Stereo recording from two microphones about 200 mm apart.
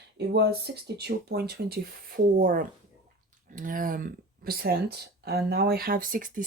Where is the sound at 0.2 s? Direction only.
55° right (ahead or behind).